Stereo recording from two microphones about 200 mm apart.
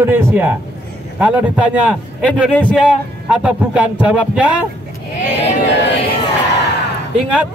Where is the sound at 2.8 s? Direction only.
5° right (ahead or behind).